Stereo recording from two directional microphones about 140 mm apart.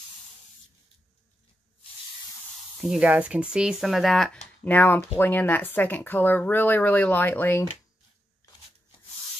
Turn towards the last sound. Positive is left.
turn(degrees=15)  # may be behind; listen again after turning